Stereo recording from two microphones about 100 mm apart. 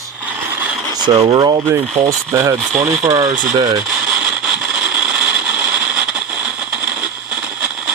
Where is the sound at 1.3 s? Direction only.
50° right (ahead or behind).